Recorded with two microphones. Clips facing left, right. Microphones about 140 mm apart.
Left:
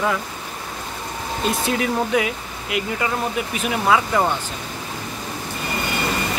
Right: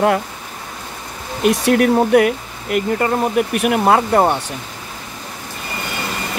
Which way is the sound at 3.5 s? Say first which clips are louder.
Right 3 dB; 60° right (ahead or behind).